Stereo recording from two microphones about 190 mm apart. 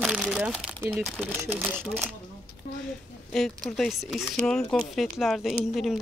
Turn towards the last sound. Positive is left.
turn(degrees=0)  # may be behind; listen again after turning